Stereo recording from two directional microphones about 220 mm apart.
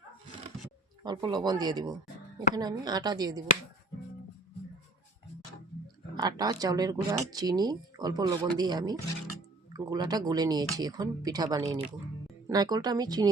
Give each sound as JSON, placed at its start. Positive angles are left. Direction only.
{"t": 1.0, "sound": "speech", "side_deg": -20}
{"t": 6.1, "sound": "speech", "side_deg": -15}